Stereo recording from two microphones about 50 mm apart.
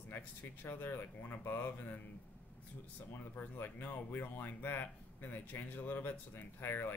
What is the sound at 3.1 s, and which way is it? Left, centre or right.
Speech, left.